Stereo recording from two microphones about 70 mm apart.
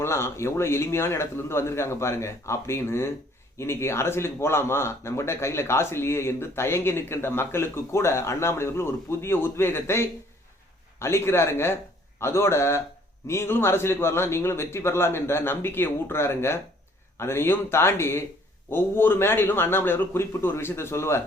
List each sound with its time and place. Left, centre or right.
0.0 s speech: left